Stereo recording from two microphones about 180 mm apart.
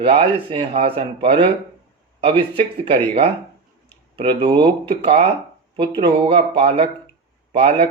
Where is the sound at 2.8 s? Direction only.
30° right (ahead or behind).